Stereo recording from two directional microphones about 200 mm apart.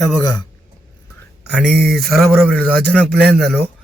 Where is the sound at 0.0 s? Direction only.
20° left (ahead or behind).